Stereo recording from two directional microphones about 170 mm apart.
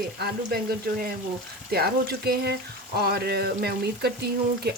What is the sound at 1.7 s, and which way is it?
Speech, 65° right (ahead or behind).